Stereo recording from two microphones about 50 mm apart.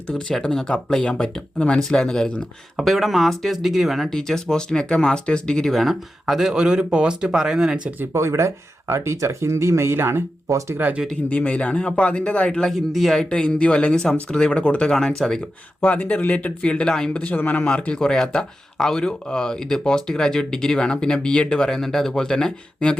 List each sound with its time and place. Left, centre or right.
0.3 s speech: centre
0.9 s speech: centre
2.7 s speech: centre
4.2 s speech: centre
5.7 s speech: centre
8.1 s speech: right
11.3 s speech: left
12.7 s speech: centre
13.3 s speech: left
14.9 s speech: centre
15.8 s speech: left
17.3 s speech: left
17.6 s speech: left
18.0 s speech: centre